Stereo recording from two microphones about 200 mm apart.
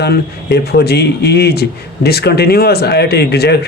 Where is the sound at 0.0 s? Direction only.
55° left (ahead or behind).